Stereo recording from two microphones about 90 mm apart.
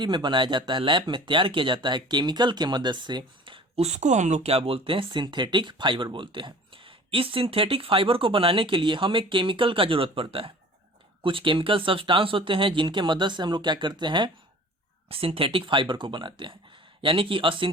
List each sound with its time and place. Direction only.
0.0 s speech: 60° right (ahead or behind)
4.5 s speech: 90° right
11.2 s speech: 75° right (ahead or behind); by 14.3 s 60° right (ahead or behind)
15.1 s speech: 90° right; by 17.7 s 70° right (ahead or behind)